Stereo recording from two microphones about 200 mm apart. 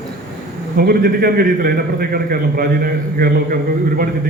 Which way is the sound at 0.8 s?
50° right (ahead or behind).